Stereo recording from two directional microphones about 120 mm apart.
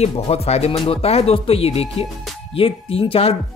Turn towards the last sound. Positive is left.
turn(degrees=55)  # may be behind; listen again after turning